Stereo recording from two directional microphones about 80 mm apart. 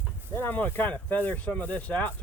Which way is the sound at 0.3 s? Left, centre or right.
Left.